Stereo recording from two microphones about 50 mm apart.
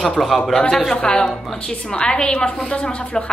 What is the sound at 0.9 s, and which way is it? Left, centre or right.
A woman's voice, centre.